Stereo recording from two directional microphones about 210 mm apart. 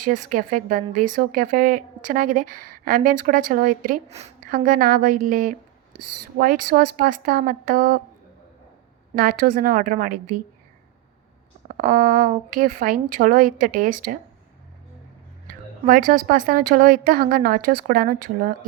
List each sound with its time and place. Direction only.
0.0 s a woman's voice: 40° right (ahead or behind)
9.1 s a woman's voice: 45° right (ahead or behind)
11.8 s a woman's voice: 40° right (ahead or behind)
15.4 s a woman's voice: 40° right (ahead or behind)